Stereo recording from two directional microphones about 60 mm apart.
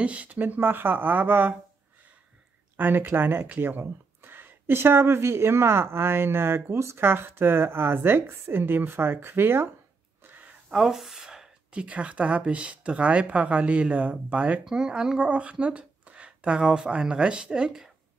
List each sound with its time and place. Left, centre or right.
0.0 s speech: right
2.8 s speech: right
10.7 s speech: centre